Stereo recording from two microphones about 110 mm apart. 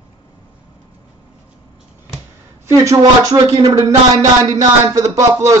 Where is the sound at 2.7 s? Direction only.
30° right (ahead or behind).